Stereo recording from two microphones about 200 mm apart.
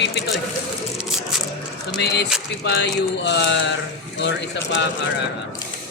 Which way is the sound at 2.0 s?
55° left (ahead or behind).